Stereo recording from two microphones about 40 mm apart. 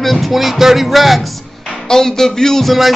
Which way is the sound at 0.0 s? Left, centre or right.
Centre.